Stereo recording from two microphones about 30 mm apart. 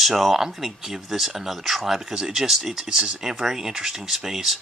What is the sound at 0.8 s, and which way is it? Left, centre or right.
Speech, centre.